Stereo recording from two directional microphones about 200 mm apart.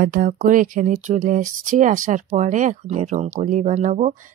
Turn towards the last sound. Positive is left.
turn(degrees=-40)  # may be behind; listen again after turning